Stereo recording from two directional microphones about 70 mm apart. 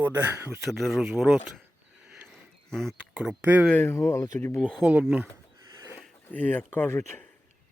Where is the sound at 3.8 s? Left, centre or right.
Left.